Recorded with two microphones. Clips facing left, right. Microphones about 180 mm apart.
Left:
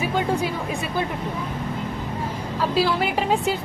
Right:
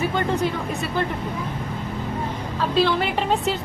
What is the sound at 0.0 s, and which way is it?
Speech, 10° left (ahead or behind).